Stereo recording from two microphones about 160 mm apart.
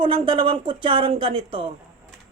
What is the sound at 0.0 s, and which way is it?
Speech, 35° right (ahead or behind).